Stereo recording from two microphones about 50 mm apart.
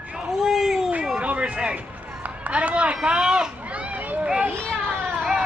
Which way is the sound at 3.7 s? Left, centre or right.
Right.